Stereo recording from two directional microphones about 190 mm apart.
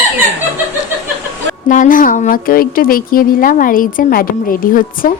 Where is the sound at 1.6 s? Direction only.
45° left (ahead or behind).